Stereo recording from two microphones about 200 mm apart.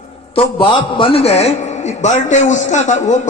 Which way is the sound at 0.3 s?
25° left (ahead or behind).